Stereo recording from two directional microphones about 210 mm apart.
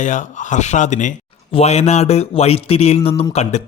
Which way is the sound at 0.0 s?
35° left (ahead or behind).